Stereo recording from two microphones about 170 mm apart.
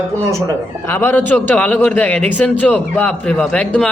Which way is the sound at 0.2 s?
15° right (ahead or behind).